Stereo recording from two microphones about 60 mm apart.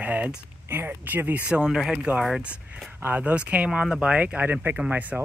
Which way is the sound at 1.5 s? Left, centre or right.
Centre.